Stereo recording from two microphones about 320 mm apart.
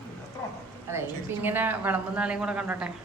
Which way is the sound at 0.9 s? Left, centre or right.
Centre.